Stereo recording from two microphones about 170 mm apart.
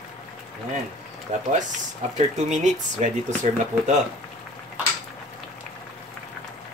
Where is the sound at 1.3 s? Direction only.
45° right (ahead or behind).